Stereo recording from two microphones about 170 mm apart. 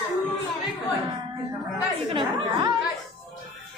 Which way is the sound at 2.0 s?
30° right (ahead or behind).